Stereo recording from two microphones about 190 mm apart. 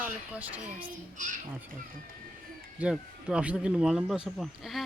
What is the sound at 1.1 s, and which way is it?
Speech, 40° right (ahead or behind).